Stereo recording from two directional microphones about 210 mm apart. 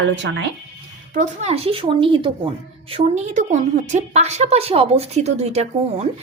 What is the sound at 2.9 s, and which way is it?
A woman's voice, 35° right (ahead or behind).